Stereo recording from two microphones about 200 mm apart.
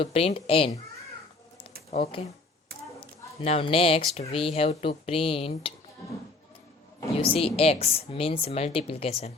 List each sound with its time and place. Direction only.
0.0 s speech: 30° left (ahead or behind)
1.9 s speech: 30° left (ahead or behind)
7.2 s speech: 30° left (ahead or behind)